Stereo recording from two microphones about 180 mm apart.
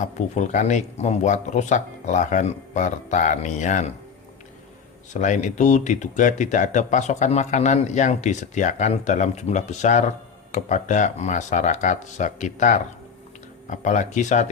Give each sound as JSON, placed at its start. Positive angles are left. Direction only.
{"t": 0.0, "sound": "speech", "side_deg": 40}
{"t": 5.1, "sound": "speech", "side_deg": 45}